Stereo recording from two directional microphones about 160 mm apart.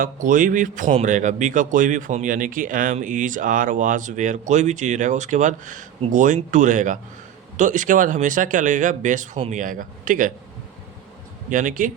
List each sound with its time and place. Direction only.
0.0 s a man's voice: 55° right (ahead or behind)
11.4 s a man's voice: 55° right (ahead or behind)